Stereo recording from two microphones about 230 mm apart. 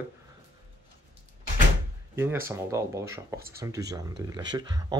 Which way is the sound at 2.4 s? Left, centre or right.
Centre.